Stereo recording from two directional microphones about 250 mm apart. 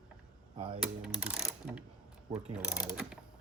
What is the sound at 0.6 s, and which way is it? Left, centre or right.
Speech, right.